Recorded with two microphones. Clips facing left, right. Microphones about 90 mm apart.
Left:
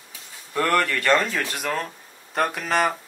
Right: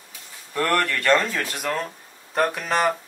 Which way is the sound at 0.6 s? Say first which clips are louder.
Left 1 dB; centre (ahead or behind).